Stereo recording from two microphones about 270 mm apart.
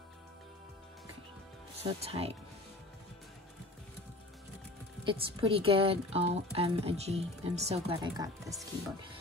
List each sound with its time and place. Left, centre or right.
1.8 s speech: right
5.0 s speech: centre